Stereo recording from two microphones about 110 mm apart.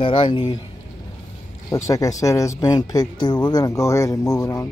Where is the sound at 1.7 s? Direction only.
30° left (ahead or behind).